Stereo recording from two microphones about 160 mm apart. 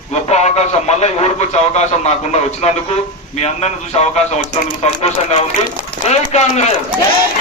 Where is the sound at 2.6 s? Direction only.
40° left (ahead or behind).